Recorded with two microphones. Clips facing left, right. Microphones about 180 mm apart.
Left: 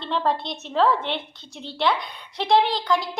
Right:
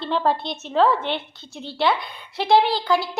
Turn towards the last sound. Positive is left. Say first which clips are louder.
# right 2 dB
turn(degrees=-5)  # may be behind; listen again after turning